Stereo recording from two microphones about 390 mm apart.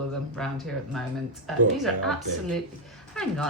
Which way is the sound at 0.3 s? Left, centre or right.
Centre.